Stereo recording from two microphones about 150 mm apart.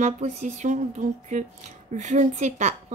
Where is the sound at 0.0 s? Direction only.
50° right (ahead or behind).